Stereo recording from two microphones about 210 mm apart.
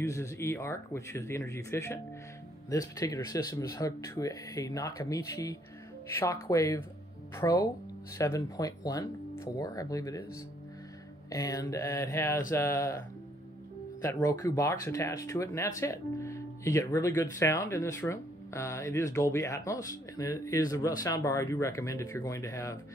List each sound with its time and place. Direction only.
0.0 s speech: 15° left (ahead or behind)
11.2 s speech: 15° left (ahead or behind)
14.0 s speech: 15° left (ahead or behind)